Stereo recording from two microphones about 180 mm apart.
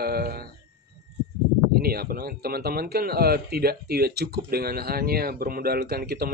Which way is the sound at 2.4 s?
60° right (ahead or behind).